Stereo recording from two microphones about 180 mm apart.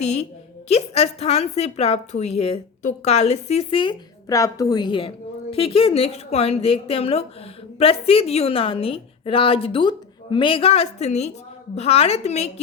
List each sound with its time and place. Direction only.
0.0 s a woman's voice: 35° left (ahead or behind)